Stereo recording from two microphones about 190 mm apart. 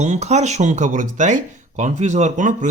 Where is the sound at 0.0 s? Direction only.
35° right (ahead or behind).